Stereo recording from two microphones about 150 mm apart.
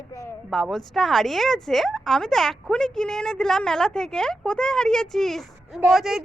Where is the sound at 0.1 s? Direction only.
20° left (ahead or behind).